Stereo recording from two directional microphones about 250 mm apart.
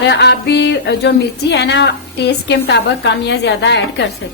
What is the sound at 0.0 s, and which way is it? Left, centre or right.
Speech, left.